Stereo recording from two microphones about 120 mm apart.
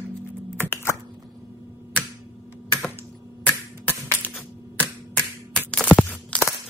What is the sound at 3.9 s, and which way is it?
Typing, 15° left (ahead or behind).